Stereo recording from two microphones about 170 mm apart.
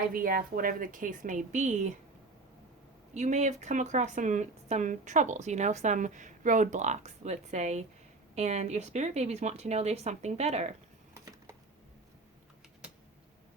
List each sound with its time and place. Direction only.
0.1 s speech: 55° right (ahead or behind)
3.2 s speech: 45° right (ahead or behind)
11.1 s a sound: 15° right (ahead or behind)